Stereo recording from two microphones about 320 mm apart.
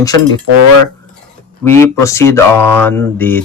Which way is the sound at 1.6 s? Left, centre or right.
Centre.